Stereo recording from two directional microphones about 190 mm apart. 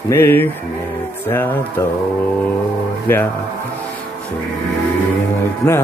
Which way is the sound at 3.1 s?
10° left (ahead or behind).